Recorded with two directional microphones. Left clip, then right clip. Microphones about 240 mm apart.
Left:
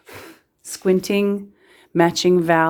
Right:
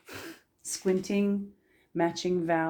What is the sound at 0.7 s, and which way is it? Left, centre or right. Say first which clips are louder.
Speech: left 10 dB; left.